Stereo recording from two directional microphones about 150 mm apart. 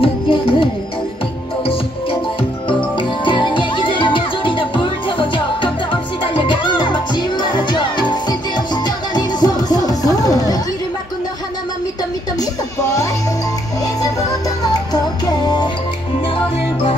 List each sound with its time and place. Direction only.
0.0 s music: 35° left (ahead or behind)
3.0 s music: 30° left (ahead or behind)
14.6 s music: 25° left (ahead or behind)